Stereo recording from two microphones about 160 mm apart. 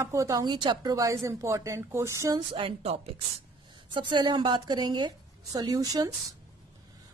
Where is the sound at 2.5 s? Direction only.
35° right (ahead or behind).